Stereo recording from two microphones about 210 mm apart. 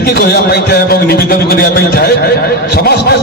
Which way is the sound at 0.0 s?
50° left (ahead or behind).